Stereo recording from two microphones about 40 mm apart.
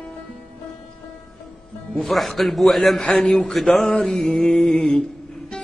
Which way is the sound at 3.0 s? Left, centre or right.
Left.